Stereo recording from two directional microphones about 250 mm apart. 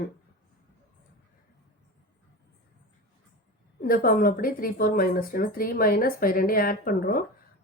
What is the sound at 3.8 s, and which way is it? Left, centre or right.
Speech, left.